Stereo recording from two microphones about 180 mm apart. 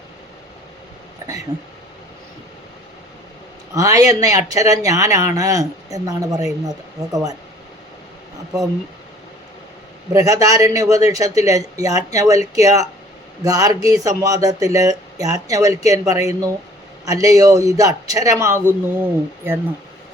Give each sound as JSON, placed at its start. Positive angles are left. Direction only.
{"t": 3.8, "sound": "speech", "side_deg": -20}
{"t": 10.1, "sound": "speech", "side_deg": -20}